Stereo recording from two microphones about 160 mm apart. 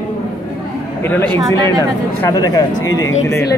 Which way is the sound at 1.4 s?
25° right (ahead or behind).